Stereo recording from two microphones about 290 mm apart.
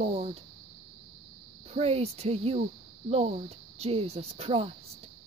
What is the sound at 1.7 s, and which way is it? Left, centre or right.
Speech, right.